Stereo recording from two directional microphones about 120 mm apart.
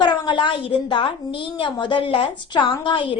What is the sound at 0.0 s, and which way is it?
A woman's voice, 40° left (ahead or behind).